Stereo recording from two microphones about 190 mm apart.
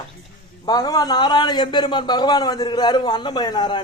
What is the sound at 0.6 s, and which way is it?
A man's voice, 20° left (ahead or behind).